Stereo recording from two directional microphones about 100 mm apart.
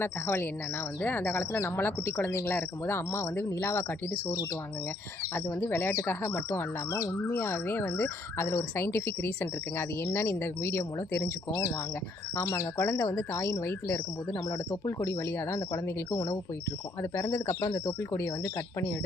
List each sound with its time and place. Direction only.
0.0 s speech: 25° left (ahead or behind)
14.3 s speech: 45° left (ahead or behind)
14.8 s speech: 30° left (ahead or behind)